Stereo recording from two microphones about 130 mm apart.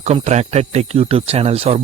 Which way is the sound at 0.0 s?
60° right (ahead or behind).